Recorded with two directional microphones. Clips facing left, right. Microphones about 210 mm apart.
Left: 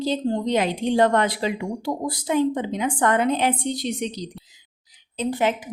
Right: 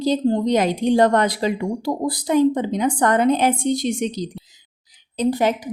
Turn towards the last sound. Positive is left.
turn(degrees=-40)  # may be behind; listen again after turning